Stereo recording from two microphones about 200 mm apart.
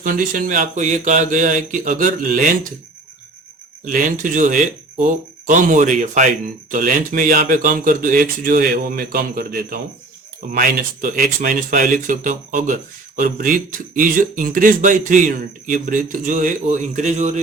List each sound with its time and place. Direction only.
0.0 s speech: 45° right (ahead or behind)
3.8 s speech: 40° right (ahead or behind)